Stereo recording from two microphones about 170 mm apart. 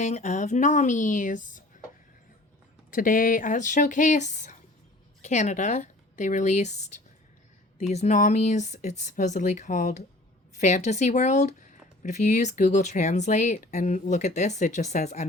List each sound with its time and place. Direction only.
0.0 s speech: 45° left (ahead or behind)
2.9 s speech: 55° left (ahead or behind)